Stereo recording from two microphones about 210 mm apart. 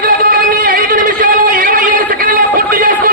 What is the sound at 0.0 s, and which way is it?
Music, 40° right (ahead or behind).